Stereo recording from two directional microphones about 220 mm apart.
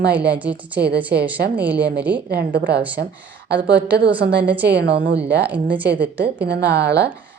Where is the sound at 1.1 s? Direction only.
45° right (ahead or behind).